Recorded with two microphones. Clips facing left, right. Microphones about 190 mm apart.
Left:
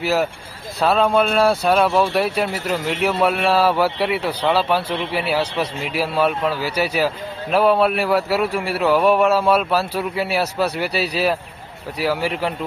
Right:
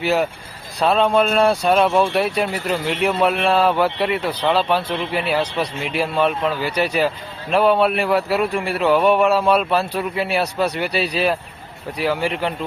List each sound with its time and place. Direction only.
0.0 s a man's voice: centre (ahead or behind)